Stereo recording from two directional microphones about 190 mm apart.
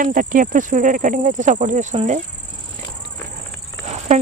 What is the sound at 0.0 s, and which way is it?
Speech, 45° right (ahead or behind).